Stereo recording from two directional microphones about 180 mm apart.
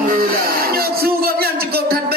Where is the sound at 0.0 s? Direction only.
55° right (ahead or behind).